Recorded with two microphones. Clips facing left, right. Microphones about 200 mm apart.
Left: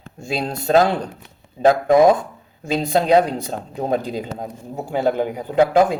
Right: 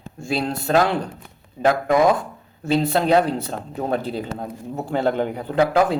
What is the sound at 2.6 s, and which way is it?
Speech, 15° left (ahead or behind).